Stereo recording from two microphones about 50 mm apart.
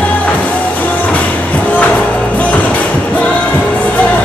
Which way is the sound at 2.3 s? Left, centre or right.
Left.